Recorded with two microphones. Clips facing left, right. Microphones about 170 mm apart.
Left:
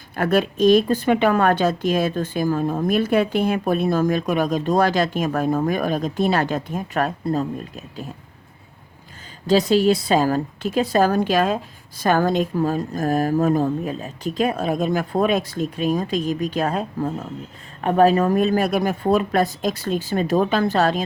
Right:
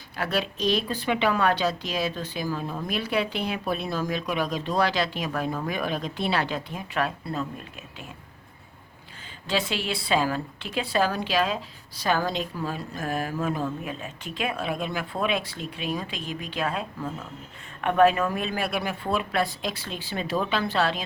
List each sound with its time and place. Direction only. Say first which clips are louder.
0.2 s a woman's voice: left 9 dB; 50° left (ahead or behind)
9.5 s a woman's voice: left 12 dB; 40° left (ahead or behind)